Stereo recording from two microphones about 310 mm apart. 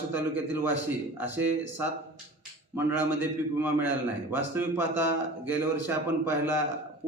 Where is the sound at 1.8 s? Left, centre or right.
Centre.